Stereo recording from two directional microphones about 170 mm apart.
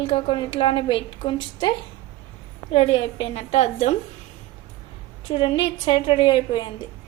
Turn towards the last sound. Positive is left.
turn(degrees=30)  # may be behind; listen again after turning